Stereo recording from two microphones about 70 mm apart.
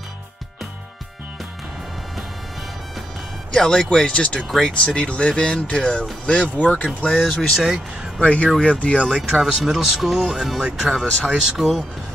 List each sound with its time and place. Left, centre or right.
3.5 s speech: centre
7.4 s speech: centre
8.2 s speech: centre
9.4 s speech: centre
10.5 s speech: centre